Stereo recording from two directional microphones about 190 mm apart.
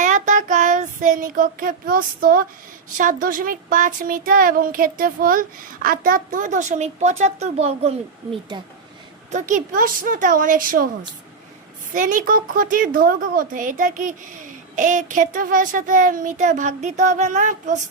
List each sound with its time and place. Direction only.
0.0 s child singing: 40° right (ahead or behind)
3.0 s speech: 45° right (ahead or behind); by 8.6 s 25° right (ahead or behind)
9.3 s speech: 40° right (ahead or behind)
11.9 s speech: 45° right (ahead or behind)